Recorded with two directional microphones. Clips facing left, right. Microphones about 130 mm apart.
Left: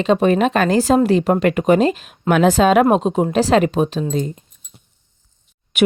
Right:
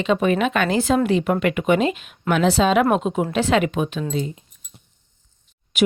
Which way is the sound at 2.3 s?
50° left (ahead or behind).